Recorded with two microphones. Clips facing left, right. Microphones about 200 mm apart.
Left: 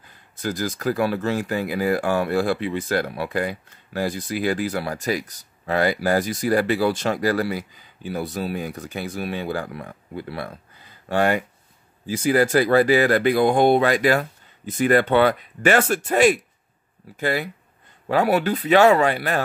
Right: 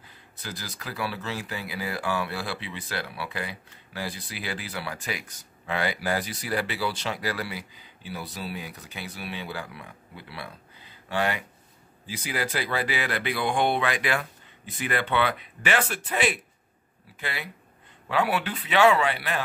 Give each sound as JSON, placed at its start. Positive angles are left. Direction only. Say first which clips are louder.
{"t": 0.4, "sound": "speech", "louder": "left 13 dB", "side_deg": 45}